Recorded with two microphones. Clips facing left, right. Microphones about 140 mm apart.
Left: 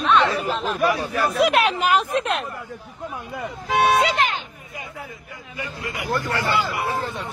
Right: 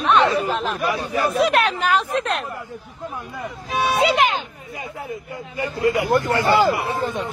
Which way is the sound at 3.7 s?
65° left (ahead or behind).